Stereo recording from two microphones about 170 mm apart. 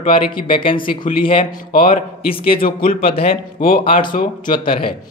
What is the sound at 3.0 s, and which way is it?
A man's voice, 35° left (ahead or behind).